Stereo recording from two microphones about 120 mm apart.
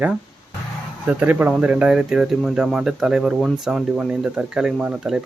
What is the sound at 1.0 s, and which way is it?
Speech, 15° right (ahead or behind).